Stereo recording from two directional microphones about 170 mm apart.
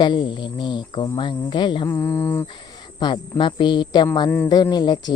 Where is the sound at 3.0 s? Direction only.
25° left (ahead or behind).